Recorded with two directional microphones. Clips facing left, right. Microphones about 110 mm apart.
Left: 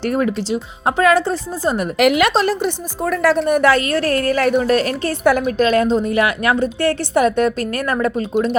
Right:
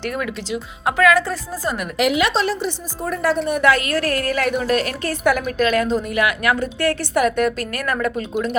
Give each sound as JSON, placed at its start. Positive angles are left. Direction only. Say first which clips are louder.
{"t": 0.0, "sound": "speech", "louder": "left 7 dB", "side_deg": 35}
{"t": 2.0, "sound": "a woman's voice", "louder": "left 3 dB", "side_deg": 60}
{"t": 3.5, "sound": "a woman's voice", "louder": "left 3 dB", "side_deg": 35}